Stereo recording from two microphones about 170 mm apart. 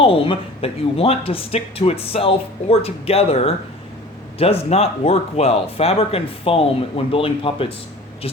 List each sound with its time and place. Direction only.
0.0 s speech: 30° left (ahead or behind)